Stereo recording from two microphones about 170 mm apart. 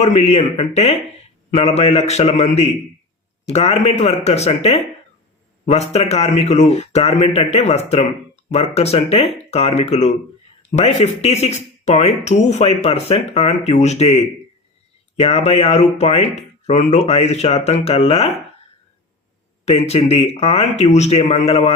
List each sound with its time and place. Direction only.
0.0 s speech: 40° left (ahead or behind)
19.6 s speech: 40° left (ahead or behind)